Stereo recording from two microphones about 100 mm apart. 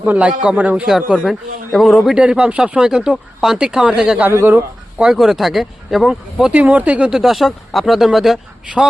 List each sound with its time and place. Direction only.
0.0 s speech: 15° right (ahead or behind)
1.3 s speech: centre (ahead or behind)
4.3 s speech: 25° right (ahead or behind)
4.9 s speech: 5° right (ahead or behind)